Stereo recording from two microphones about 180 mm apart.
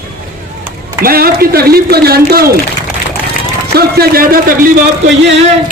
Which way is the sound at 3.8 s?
60° right (ahead or behind).